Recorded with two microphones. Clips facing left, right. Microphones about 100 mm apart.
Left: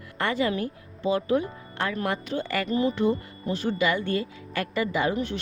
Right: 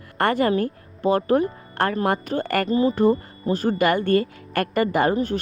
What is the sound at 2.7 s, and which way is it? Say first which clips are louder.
Speech: right 5 dB; 35° right (ahead or behind).